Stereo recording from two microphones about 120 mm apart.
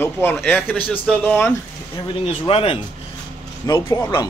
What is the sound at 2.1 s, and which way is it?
Speech, 50° left (ahead or behind).